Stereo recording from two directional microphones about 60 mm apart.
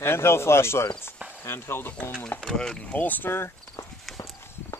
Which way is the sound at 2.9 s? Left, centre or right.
Left.